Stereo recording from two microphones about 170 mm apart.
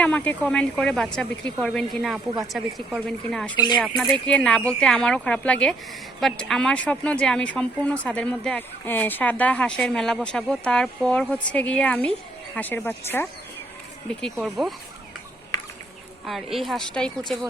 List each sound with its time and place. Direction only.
0.0 s speech: 10° left (ahead or behind)
3.5 s speech: 25° left (ahead or behind)
3.8 s speech: centre (ahead or behind)
16.2 s speech: centre (ahead or behind)